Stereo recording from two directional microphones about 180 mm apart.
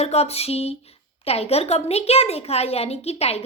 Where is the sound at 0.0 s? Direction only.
35° left (ahead or behind).